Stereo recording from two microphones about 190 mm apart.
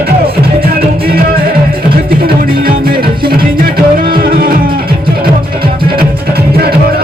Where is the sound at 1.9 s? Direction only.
50° right (ahead or behind).